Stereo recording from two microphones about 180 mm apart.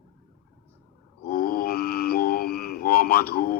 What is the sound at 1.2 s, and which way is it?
Mantra, 55° left (ahead or behind).